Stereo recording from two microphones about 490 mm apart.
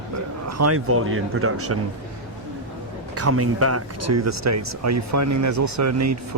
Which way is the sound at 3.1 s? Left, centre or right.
Right.